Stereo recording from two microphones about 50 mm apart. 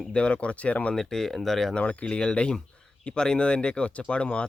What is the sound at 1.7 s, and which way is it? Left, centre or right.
Speech, left.